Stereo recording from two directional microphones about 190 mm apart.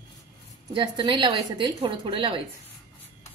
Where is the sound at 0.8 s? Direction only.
25° right (ahead or behind).